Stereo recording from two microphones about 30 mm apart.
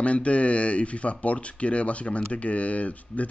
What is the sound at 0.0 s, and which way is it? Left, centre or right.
Speech, left.